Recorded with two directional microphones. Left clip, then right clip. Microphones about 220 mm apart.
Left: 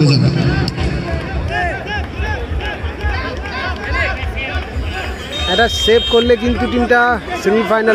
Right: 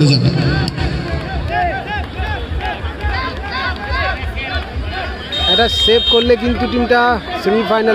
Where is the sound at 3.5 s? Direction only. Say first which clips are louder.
Right 1 dB; 35° right (ahead or behind).